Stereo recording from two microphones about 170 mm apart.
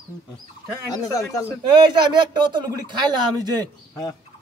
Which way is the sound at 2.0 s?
25° right (ahead or behind).